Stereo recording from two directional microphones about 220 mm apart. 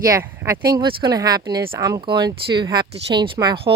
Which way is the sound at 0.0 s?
10° right (ahead or behind).